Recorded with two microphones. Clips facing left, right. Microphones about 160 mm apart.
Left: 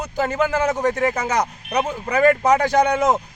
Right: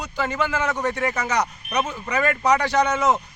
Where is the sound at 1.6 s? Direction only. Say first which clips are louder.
Left 3 dB; 90° left.